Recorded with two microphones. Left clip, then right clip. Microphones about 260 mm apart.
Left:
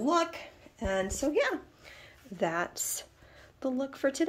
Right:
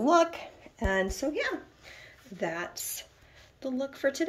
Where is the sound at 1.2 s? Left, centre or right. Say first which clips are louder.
Left 2 dB; centre.